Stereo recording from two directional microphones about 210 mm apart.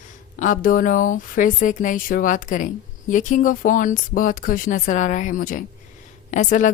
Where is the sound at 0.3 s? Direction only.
40° left (ahead or behind).